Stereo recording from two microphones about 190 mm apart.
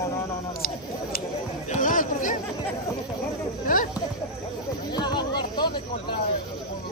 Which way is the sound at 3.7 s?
45° left (ahead or behind).